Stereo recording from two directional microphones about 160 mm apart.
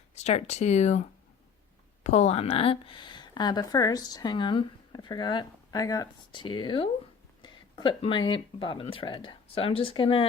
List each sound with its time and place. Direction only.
0.1 s speech: 45° left (ahead or behind)
2.0 s speech: 45° left (ahead or behind)